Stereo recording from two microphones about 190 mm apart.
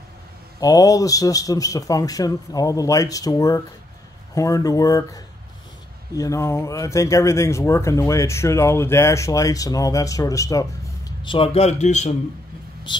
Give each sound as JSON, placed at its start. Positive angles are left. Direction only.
{"t": 0.6, "sound": "speech", "side_deg": 20}